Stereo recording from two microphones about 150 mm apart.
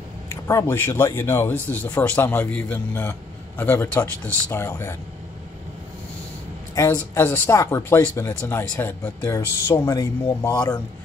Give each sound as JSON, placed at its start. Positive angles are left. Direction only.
{"t": 0.3, "sound": "speech", "side_deg": 20}
{"t": 6.7, "sound": "speech", "side_deg": 20}